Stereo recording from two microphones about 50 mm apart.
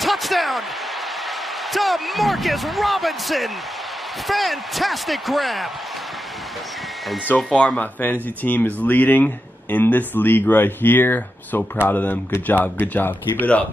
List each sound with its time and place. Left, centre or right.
0.0 s slam: centre
1.7 s speech: centre
7.5 s speech: left
7.8 s speech: left